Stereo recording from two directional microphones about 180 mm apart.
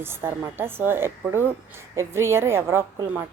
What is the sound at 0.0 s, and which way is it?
A woman's voice, 15° right (ahead or behind).